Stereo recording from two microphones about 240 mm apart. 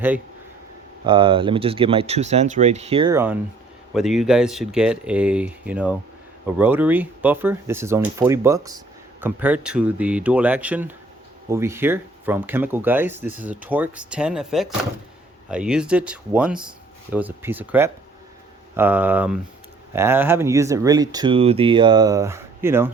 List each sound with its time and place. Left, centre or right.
1.0 s speech: right
3.1 s speech: centre